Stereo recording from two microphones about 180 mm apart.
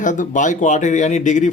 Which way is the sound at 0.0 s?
45° left (ahead or behind).